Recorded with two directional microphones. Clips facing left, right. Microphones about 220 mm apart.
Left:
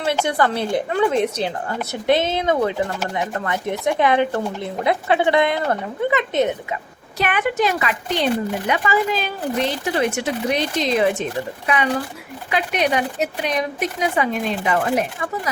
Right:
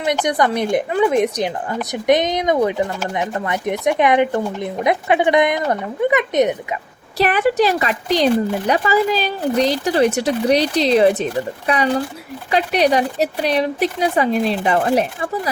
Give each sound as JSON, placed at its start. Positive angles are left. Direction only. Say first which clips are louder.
{"t": 0.0, "sound": "speech", "louder": "right 2 dB", "side_deg": -15}
{"t": 7.2, "sound": "speech", "louder": "right 5 dB", "side_deg": -35}